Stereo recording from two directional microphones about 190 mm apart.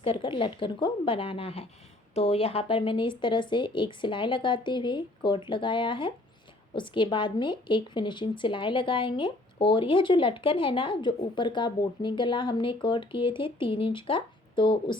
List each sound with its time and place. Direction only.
0.0 s a woman's voice: 25° left (ahead or behind)